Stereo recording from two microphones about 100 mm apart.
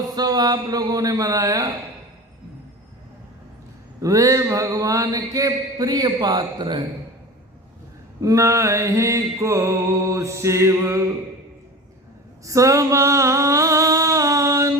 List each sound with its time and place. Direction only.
0.2 s music: 40° right (ahead or behind)
4.0 s music: 35° right (ahead or behind)
6.1 s a man's voice: 45° right (ahead or behind)
8.2 s music: 35° right (ahead or behind)
12.5 s a sound: 30° right (ahead or behind)